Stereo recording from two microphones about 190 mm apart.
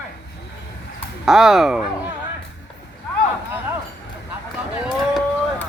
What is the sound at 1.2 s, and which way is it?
Speech, 5° right (ahead or behind).